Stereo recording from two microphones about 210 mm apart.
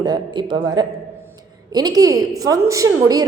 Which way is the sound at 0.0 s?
20° right (ahead or behind).